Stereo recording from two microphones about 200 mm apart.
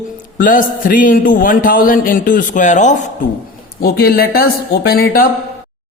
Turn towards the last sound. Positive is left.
turn(degrees=50)  # may be behind; listen again after turning